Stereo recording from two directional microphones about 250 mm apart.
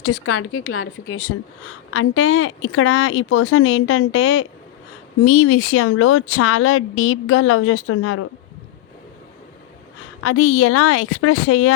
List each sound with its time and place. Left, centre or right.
0.0 s speech: left
1.9 s speech: left
10.2 s speech: left